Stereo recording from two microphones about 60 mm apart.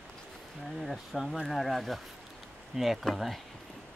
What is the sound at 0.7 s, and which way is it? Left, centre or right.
Speech, centre.